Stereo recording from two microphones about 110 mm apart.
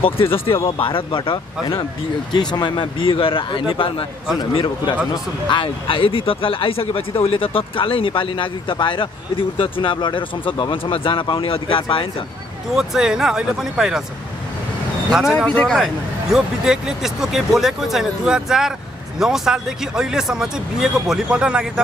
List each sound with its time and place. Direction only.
0.0 s speech: 55° left (ahead or behind)
2.5 s speech: 45° left (ahead or behind)
5.1 s speech: 45° left (ahead or behind)
12.7 s speech: 5° right (ahead or behind)
15.0 s speech: 5° right (ahead or behind)
15.3 s speech: 10° left (ahead or behind)